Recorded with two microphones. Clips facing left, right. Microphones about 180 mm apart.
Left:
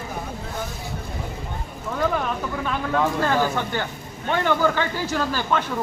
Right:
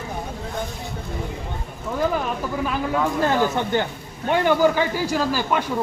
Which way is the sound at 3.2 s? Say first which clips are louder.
Right 2 dB; 20° right (ahead or behind).